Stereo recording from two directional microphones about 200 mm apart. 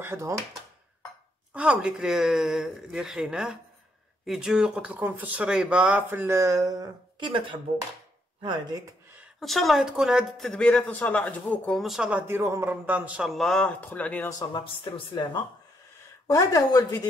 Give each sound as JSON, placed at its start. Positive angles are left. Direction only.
{"t": 0.0, "sound": "speech", "side_deg": -15}
{"t": 1.5, "sound": "speech", "side_deg": -5}
{"t": 9.4, "sound": "speech", "side_deg": 0}
{"t": 14.5, "sound": "speech", "side_deg": 25}
{"t": 16.3, "sound": "speech", "side_deg": 15}